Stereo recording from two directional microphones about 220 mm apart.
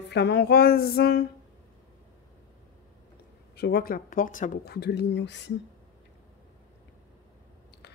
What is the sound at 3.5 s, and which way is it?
Speech, 45° left (ahead or behind).